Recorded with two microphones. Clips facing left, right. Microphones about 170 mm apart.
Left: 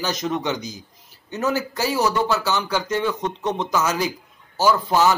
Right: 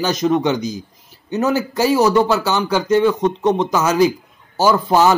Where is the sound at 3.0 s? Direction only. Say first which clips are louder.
Right 8 dB; 50° right (ahead or behind).